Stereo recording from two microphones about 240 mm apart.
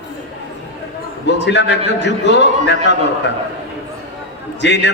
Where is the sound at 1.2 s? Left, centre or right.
Left.